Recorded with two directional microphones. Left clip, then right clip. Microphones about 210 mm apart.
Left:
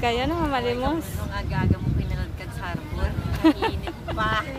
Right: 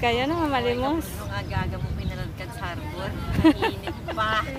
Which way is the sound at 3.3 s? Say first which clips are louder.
Right 1 dB; centre (ahead or behind).